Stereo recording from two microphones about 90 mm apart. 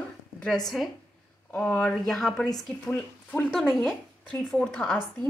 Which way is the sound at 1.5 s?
15° left (ahead or behind).